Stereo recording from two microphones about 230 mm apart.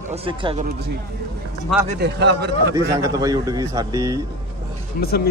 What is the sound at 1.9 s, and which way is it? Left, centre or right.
Speech, right.